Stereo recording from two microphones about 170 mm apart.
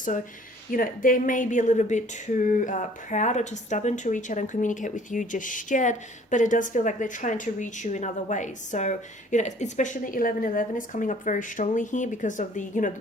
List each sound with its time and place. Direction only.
0.7 s speech: 55° left (ahead or behind)